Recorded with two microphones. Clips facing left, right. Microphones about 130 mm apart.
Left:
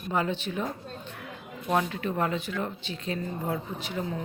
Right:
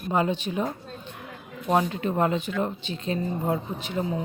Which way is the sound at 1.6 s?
25° right (ahead or behind).